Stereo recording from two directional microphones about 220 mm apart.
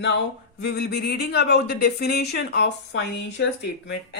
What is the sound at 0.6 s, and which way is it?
Speech, 45° left (ahead or behind).